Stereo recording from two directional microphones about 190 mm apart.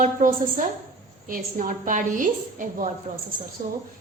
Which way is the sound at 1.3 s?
45° right (ahead or behind).